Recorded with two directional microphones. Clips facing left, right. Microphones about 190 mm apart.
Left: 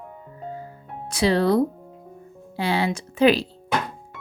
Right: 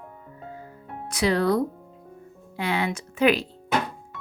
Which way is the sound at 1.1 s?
30° left (ahead or behind).